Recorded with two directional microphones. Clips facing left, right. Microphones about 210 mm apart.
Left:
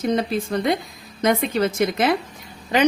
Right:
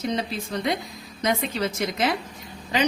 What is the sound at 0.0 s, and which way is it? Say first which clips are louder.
A woman's voice: left 6 dB; 55° left (ahead or behind).